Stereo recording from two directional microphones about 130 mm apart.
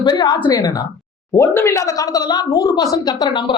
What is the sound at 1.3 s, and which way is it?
A woman's voice, 20° left (ahead or behind).